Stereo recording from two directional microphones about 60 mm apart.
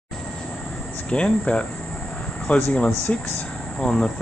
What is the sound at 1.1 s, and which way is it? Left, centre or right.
Speech, centre.